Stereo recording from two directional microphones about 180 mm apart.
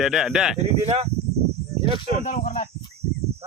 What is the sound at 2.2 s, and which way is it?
Speech, 45° left (ahead or behind).